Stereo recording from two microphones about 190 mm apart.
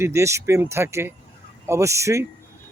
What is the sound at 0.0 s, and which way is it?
Speech, 15° right (ahead or behind).